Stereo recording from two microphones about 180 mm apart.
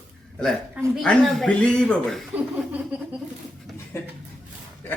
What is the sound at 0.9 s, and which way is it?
A man's voice, centre (ahead or behind).